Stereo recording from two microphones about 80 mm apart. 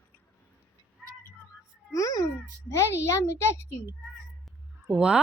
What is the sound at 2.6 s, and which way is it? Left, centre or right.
A child's voice, left.